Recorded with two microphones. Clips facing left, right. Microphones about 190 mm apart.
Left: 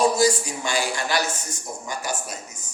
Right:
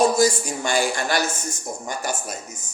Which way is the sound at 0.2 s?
50° right (ahead or behind).